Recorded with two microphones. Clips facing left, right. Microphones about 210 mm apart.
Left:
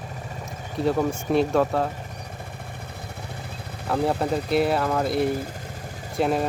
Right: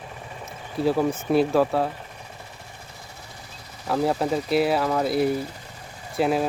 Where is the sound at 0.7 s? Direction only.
5° right (ahead or behind).